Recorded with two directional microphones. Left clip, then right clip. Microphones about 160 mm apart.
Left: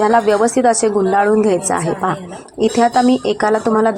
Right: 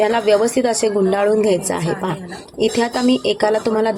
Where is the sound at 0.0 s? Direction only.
5° right (ahead or behind).